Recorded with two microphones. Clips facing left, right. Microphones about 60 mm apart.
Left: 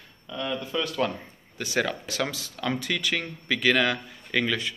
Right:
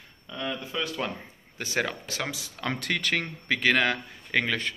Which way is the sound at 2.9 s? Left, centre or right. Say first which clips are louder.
Even; right.